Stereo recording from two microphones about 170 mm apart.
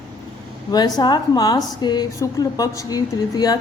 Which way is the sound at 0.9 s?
25° left (ahead or behind).